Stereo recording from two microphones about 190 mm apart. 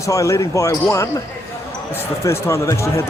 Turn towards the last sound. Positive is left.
turn(degrees=15)  # may be behind; listen again after turning